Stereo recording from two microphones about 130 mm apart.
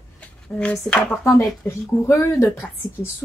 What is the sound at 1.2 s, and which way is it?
A woman's voice, 20° left (ahead or behind).